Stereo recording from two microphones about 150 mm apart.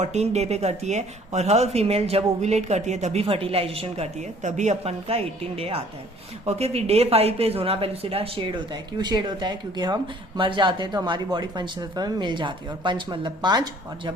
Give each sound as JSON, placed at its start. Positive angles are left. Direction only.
{"t": 0.0, "sound": "a woman's voice", "side_deg": -45}